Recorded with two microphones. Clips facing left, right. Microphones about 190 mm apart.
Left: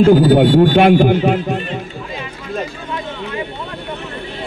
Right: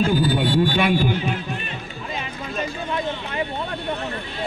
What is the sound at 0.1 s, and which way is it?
A man's voice, 60° left (ahead or behind).